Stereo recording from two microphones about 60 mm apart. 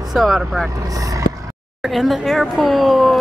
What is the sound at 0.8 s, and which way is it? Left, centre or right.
Speech, right.